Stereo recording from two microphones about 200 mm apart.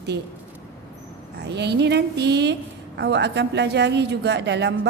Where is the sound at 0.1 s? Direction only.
55° right (ahead or behind).